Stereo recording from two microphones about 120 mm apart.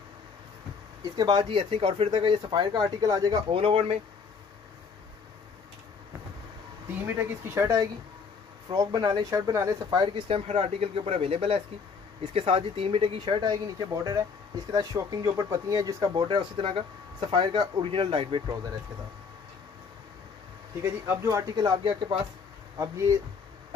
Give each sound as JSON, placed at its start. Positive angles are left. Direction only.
{"t": 1.1, "sound": "speech", "side_deg": -35}
{"t": 3.5, "sound": "speech", "side_deg": -50}
{"t": 6.9, "sound": "speech", "side_deg": -15}
{"t": 10.3, "sound": "speech", "side_deg": -55}
{"t": 20.8, "sound": "speech", "side_deg": -25}
{"t": 22.8, "sound": "speech", "side_deg": -25}